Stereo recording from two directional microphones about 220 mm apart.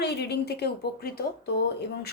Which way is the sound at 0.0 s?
50° left (ahead or behind).